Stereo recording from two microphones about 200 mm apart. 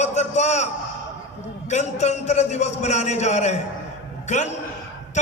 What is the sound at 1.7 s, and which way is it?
A man's voice, 35° left (ahead or behind).